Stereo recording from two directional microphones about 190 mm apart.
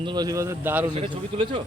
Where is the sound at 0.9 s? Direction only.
30° right (ahead or behind).